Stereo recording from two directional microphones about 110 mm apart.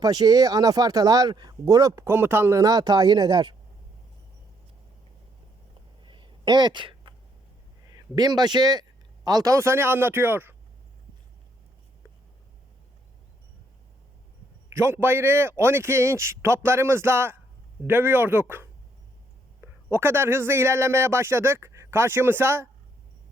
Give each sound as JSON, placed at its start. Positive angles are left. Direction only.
{"t": 0.0, "sound": "speech", "side_deg": -35}
{"t": 6.0, "sound": "a sound", "side_deg": -45}
{"t": 7.9, "sound": "speech", "side_deg": -40}
{"t": 14.7, "sound": "a man's voice", "side_deg": -25}